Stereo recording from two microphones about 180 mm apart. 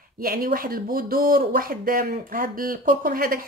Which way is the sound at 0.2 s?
55° right (ahead or behind).